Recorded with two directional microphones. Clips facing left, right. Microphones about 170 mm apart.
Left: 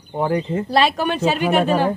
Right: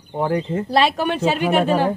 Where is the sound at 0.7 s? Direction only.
25° right (ahead or behind).